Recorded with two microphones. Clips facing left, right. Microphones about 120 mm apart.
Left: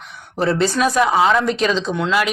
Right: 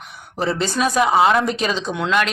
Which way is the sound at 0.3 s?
Centre (ahead or behind).